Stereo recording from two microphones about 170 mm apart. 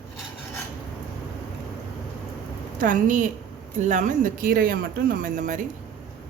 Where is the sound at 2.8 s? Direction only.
50° right (ahead or behind).